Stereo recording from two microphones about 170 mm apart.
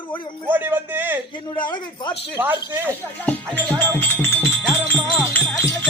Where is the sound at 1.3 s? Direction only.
30° left (ahead or behind).